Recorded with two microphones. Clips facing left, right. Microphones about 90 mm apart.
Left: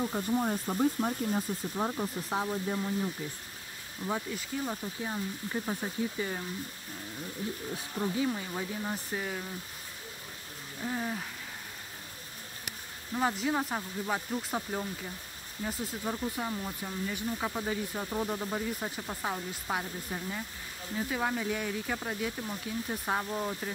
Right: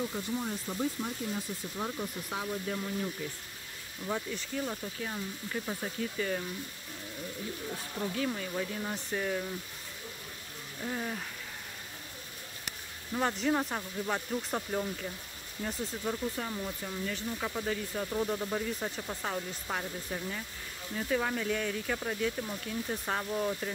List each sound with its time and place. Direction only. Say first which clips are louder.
0.1 s speech: left 5 dB; 40° left (ahead or behind); by 2.8 s 25° left (ahead or behind)
4.1 s speech: even; 15° left (ahead or behind)
8.2 s speech: left 1 dB; 20° left (ahead or behind)
10.8 s speech: left 2 dB; 10° left (ahead or behind)
13.1 s speech: even; 5° left (ahead or behind)